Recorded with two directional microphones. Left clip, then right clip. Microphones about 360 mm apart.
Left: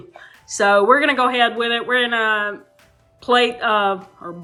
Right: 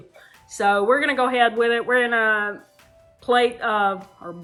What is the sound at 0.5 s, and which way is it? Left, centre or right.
Speech, centre.